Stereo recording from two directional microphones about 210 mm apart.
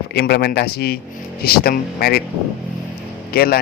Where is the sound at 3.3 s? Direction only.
45° left (ahead or behind).